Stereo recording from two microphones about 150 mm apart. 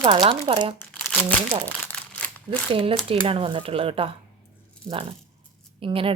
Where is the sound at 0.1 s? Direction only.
35° right (ahead or behind).